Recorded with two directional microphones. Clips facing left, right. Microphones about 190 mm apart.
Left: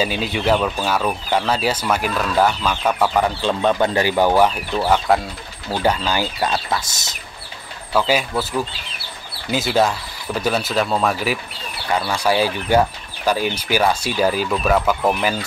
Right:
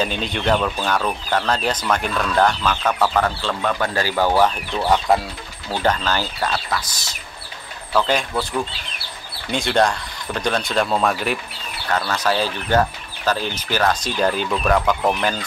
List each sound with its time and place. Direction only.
0.0 s speech: 5° left (ahead or behind)
6.5 s speech: 25° left (ahead or behind)
7.9 s speech: 5° left (ahead or behind)